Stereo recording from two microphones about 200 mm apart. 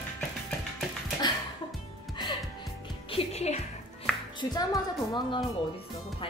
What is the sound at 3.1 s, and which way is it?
Music, 30° left (ahead or behind).